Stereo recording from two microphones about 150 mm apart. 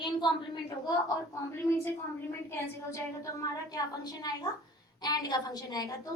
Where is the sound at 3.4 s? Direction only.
25° left (ahead or behind).